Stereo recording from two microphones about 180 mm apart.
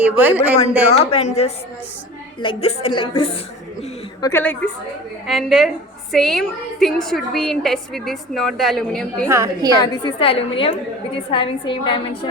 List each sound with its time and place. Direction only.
0.0 s a man's voice: 10° right (ahead or behind)
0.9 s a woman's voice: 35° left (ahead or behind)
4.2 s a woman's voice: 15° left (ahead or behind)
5.2 s a woman's voice: centre (ahead or behind)
9.3 s a man's voice: 15° right (ahead or behind)
9.7 s a woman's voice: 25° left (ahead or behind)